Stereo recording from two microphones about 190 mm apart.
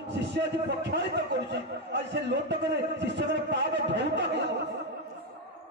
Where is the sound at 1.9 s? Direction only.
65° right (ahead or behind).